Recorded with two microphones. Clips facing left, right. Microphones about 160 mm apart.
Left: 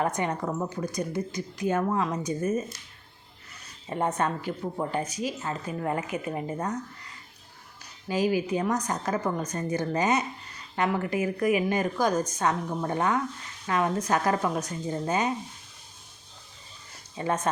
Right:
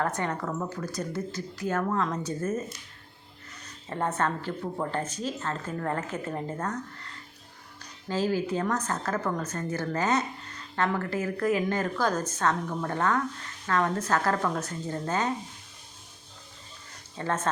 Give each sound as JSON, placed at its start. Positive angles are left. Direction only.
{"t": 0.0, "sound": "speech", "side_deg": 15}
{"t": 3.8, "sound": "speech", "side_deg": 15}
{"t": 17.2, "sound": "speech", "side_deg": 15}